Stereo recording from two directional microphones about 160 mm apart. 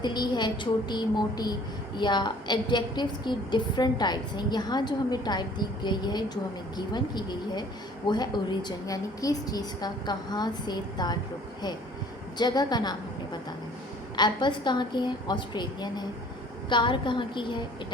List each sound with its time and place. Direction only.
0.0 s a woman's voice: 25° left (ahead or behind)
12.4 s a woman's voice: 25° left (ahead or behind)